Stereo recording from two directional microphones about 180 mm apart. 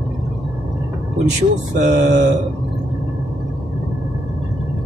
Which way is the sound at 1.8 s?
45° right (ahead or behind).